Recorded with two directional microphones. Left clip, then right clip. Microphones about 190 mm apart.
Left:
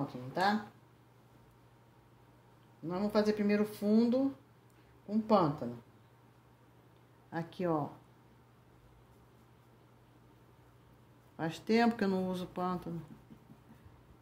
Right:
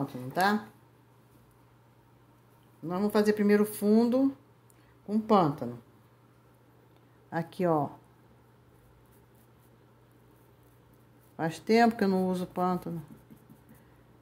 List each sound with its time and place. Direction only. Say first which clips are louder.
0.3 s speech: right 5 dB; 30° right (ahead or behind)
2.9 s speech: right 5 dB; 30° right (ahead or behind)
7.2 s speech: right 7 dB; 20° right (ahead or behind)
11.3 s speech: right 6 dB; 20° right (ahead or behind)